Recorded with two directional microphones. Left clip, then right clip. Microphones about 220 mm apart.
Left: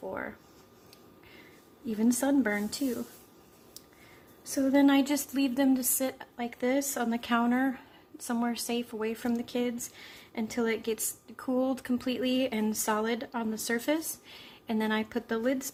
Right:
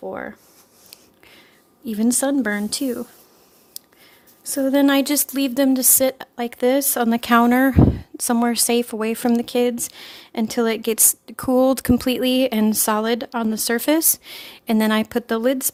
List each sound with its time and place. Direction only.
0.1 s speech: 40° right (ahead or behind)
1.4 s speech: 45° right (ahead or behind)
3.8 s a sound: 45° right (ahead or behind)
4.5 s speech: 50° right (ahead or behind)